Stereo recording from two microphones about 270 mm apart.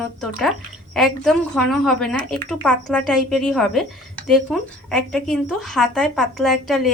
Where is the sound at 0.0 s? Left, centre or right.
Centre.